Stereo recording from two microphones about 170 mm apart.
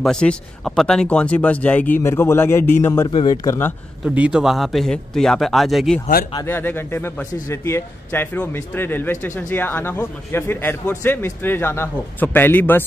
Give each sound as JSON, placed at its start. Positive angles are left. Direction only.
{"t": 0.0, "sound": "a man's voice", "side_deg": 5}
{"t": 3.1, "sound": "speech", "side_deg": 30}
{"t": 3.4, "sound": "a man's voice", "side_deg": 15}
{"t": 4.0, "sound": "a man's voice", "side_deg": -5}
{"t": 6.4, "sound": "a man's voice", "side_deg": 10}